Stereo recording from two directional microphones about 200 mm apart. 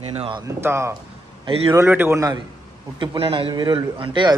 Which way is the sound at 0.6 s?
10° right (ahead or behind).